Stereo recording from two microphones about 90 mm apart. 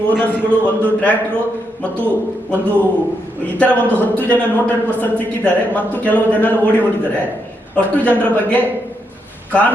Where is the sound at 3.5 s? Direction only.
15° left (ahead or behind).